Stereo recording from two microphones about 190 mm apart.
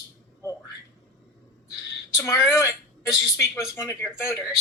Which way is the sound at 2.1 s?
15° left (ahead or behind).